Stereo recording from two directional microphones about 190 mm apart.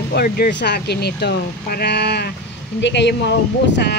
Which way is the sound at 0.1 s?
55° left (ahead or behind).